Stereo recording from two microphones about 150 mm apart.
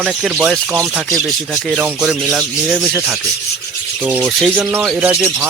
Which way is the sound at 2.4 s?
5° right (ahead or behind).